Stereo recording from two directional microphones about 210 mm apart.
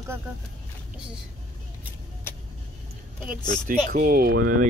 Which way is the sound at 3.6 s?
40° right (ahead or behind).